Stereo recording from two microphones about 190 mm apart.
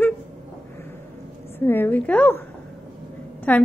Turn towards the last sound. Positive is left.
turn(degrees=10)  # may be behind; listen again after turning